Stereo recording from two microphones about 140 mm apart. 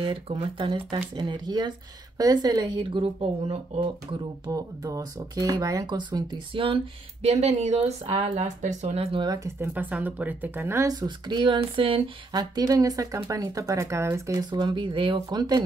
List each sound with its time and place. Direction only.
0.0 s speech: 40° right (ahead or behind)
4.5 s speech: 25° right (ahead or behind)
7.2 s speech: 50° right (ahead or behind)
9.2 s speech: 25° right (ahead or behind)
9.6 s speech: 10° right (ahead or behind)
10.9 s speech: 30° right (ahead or behind)